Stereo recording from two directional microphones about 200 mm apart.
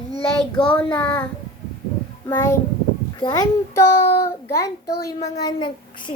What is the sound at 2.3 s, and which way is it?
A woman's voice, 15° left (ahead or behind).